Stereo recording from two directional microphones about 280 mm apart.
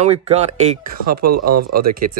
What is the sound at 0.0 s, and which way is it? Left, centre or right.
Speech, right.